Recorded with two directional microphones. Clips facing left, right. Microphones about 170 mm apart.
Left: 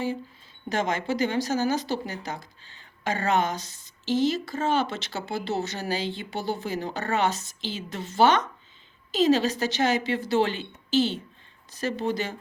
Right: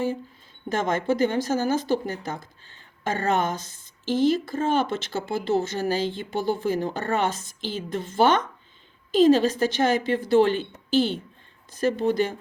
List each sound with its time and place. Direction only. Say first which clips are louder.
0.7 s speech: right 3 dB; 50° right (ahead or behind)